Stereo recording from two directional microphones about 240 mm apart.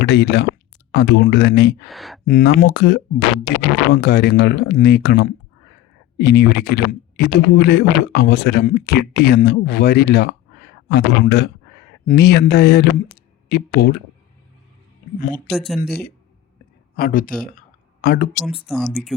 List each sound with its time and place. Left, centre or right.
0.0 s speech: left
1.9 s speech: centre
2.2 s speech: left
15.5 s speech: centre
15.8 s speech: left
18.3 s speech: centre